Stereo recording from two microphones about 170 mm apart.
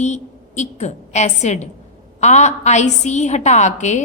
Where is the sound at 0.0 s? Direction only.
40° left (ahead or behind).